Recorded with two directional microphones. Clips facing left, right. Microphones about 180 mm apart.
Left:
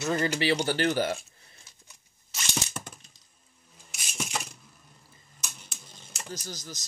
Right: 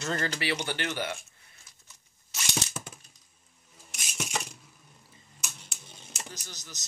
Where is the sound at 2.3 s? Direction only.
5° right (ahead or behind).